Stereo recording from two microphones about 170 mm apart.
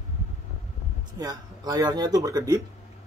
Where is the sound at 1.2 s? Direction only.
25° right (ahead or behind).